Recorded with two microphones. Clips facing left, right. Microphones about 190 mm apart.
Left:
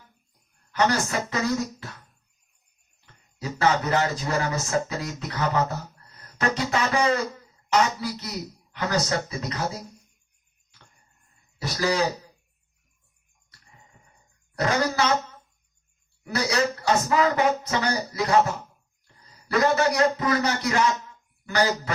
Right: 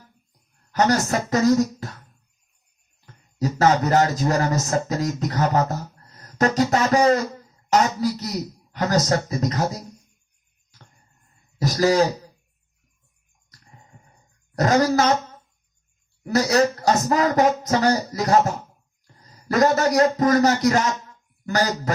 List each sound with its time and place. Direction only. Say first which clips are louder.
0.7 s speech: right 4 dB; 40° right (ahead or behind)
3.3 s speech: right 5 dB; 40° right (ahead or behind)
6.1 s music: right 7 dB; 40° right (ahead or behind)
7.7 s speech: right 4 dB; 40° right (ahead or behind)
11.5 s a man's voice: right 7 dB; 40° right (ahead or behind)
14.5 s speech: right 6 dB; 40° right (ahead or behind)
16.2 s speech: right 6 dB; 40° right (ahead or behind)